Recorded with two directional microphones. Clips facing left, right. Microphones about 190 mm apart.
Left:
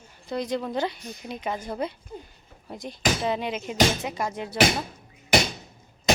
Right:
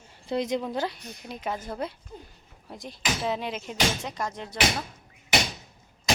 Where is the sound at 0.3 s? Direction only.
20° right (ahead or behind).